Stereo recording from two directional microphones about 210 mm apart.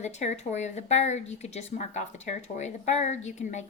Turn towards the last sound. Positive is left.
turn(degrees=35)  # may be behind; listen again after turning